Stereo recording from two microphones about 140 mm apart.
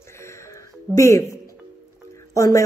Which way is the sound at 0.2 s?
20° left (ahead or behind).